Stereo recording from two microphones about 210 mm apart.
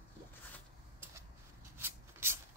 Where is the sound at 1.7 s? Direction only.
10° right (ahead or behind).